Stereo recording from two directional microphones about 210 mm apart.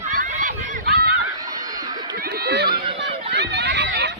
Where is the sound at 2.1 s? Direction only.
45° right (ahead or behind).